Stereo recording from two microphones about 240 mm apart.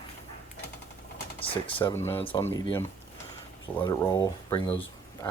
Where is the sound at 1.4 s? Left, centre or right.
Left.